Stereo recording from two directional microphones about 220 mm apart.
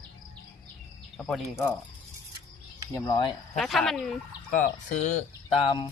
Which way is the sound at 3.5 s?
Centre (ahead or behind).